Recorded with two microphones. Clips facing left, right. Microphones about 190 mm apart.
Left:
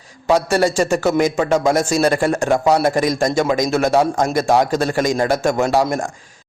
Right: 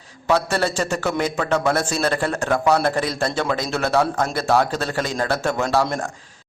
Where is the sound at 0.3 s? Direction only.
10° left (ahead or behind).